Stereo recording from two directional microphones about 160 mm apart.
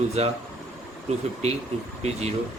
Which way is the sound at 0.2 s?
40° right (ahead or behind).